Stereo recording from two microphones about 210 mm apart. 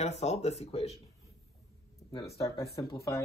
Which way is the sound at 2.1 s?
15° left (ahead or behind).